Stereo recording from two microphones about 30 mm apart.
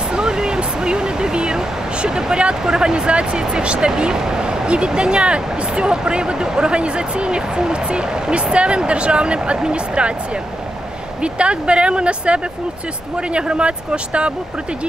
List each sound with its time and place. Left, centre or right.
0.1 s a sound: right
2.6 s speech: right
11.3 s speech: right